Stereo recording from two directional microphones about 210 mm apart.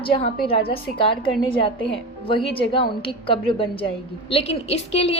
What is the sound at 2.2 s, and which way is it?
A woman's voice, 25° left (ahead or behind).